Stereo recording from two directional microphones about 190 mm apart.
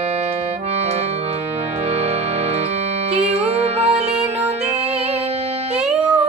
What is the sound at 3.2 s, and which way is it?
Music, 35° right (ahead or behind).